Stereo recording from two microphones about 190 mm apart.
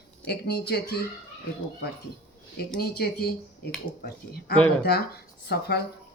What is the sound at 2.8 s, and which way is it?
Speech, 55° left (ahead or behind).